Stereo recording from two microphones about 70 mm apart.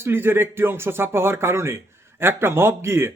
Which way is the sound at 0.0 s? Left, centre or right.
Right.